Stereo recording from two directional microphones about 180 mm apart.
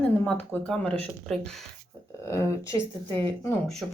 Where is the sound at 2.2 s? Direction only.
15° left (ahead or behind).